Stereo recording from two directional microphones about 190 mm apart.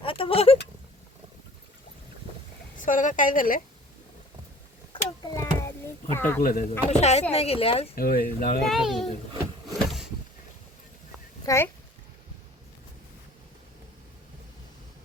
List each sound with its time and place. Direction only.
0.0 s a sound: 30° left (ahead or behind)
2.7 s a woman's voice: 45° left (ahead or behind)
5.3 s a sound: 15° left (ahead or behind)
6.1 s speech: 10° left (ahead or behind)
6.4 s speech: 45° left (ahead or behind); by 7.9 s 30° left (ahead or behind)
7.9 s a woman's voice: 50° left (ahead or behind)
8.7 s a child's voice: centre (ahead or behind)
11.4 s speech: 15° left (ahead or behind)